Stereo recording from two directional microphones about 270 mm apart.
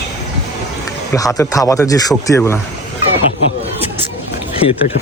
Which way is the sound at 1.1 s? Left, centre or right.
Centre.